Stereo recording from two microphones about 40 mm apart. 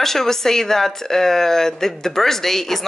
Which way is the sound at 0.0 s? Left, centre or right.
Centre.